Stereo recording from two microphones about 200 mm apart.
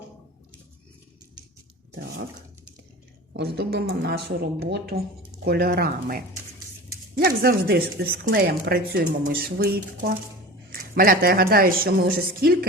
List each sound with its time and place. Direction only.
3.3 s a woman's voice: 55° right (ahead or behind)